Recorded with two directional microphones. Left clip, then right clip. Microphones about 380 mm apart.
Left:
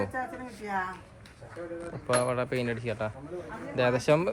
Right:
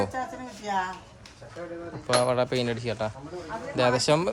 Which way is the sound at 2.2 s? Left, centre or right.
Centre.